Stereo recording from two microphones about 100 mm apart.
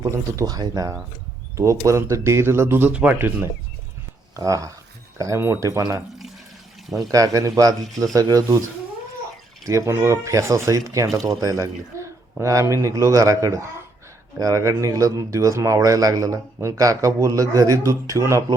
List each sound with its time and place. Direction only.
0.0 s speech: 35° right (ahead or behind)
4.4 s speech: 35° right (ahead or behind)
9.6 s speech: 30° right (ahead or behind)